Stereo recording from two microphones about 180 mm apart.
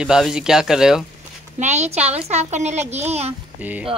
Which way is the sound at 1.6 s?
40° right (ahead or behind).